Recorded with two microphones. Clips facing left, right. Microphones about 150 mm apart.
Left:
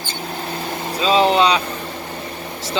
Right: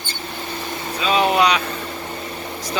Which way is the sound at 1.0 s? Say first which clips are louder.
Left 2 dB; 30° left (ahead or behind).